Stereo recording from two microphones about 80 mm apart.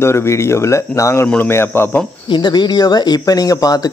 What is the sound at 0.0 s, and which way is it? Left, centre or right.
Speech, left.